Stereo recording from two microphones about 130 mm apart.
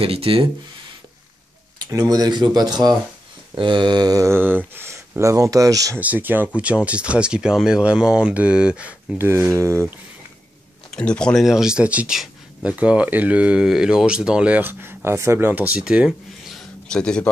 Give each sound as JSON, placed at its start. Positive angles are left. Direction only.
{"t": 0.0, "sound": "speech", "side_deg": -45}
{"t": 1.9, "sound": "speech", "side_deg": -30}
{"t": 5.9, "sound": "speech", "side_deg": -15}
{"t": 11.0, "sound": "speech", "side_deg": 5}